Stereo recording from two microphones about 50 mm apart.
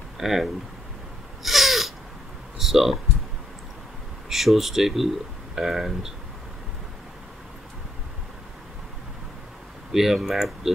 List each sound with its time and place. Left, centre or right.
0.2 s speech: centre
1.4 s a sound: centre
2.6 s speech: centre
4.3 s speech: centre
9.9 s speech: centre